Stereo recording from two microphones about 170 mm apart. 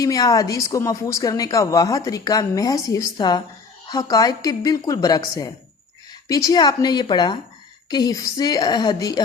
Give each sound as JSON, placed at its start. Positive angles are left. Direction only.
{"t": 0.0, "sound": "a woman's voice", "side_deg": 20}